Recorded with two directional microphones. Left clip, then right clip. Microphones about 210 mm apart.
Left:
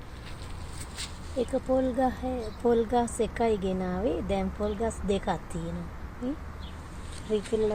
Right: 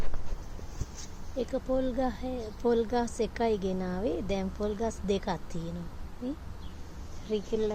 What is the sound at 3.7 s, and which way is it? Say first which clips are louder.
Speech: left 3 dB; 15° right (ahead or behind).